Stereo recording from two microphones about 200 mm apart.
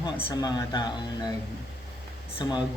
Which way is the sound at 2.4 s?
20° left (ahead or behind).